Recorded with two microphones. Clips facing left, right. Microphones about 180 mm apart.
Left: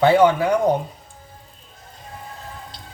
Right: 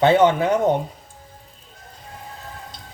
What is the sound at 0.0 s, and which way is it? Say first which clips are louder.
Speech: left 1 dB; 20° right (ahead or behind).